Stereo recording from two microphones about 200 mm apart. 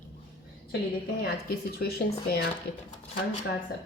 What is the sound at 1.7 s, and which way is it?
Speech, 50° left (ahead or behind).